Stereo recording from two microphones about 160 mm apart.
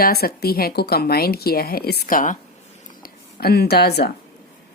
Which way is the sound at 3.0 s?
75° left (ahead or behind).